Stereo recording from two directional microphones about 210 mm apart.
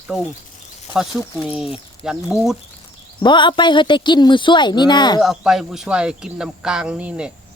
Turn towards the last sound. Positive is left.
turn(degrees=-5)  # may be behind; listen again after turning